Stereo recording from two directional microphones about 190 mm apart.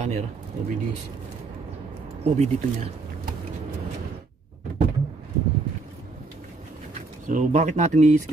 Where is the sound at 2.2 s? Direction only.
35° right (ahead or behind).